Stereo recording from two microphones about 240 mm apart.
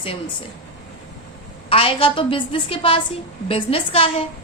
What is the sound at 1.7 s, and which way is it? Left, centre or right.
A woman's voice, left.